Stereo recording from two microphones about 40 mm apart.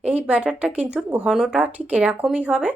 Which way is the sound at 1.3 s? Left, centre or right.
Right.